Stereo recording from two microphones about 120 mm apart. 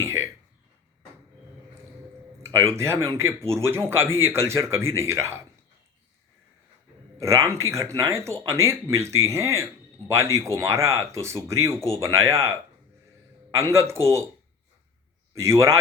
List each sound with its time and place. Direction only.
0.0 s cough: 25° right (ahead or behind)
2.4 s speech: 25° right (ahead or behind)
7.2 s speech: 25° right (ahead or behind)
13.6 s speech: 25° right (ahead or behind)
15.4 s speech: 25° right (ahead or behind)